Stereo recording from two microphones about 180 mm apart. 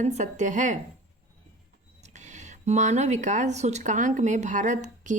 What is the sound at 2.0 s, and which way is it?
Speech, 40° right (ahead or behind).